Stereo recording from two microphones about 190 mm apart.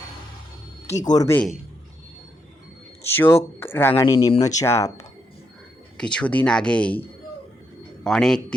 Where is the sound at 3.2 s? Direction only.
10° left (ahead or behind).